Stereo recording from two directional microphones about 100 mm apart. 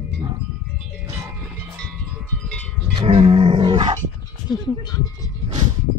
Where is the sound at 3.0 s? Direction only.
75° right (ahead or behind); by 3.8 s 60° right (ahead or behind).